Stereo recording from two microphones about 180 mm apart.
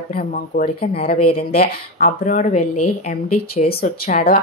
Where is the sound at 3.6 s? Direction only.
55° left (ahead or behind).